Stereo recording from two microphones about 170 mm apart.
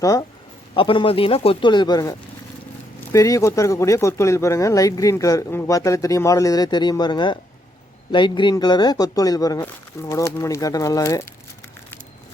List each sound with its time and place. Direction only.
0.0 s speech: 20° left (ahead or behind)
0.7 s speech: 30° left (ahead or behind)